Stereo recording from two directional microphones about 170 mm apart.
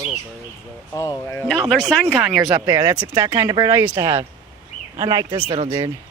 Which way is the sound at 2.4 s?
20° right (ahead or behind).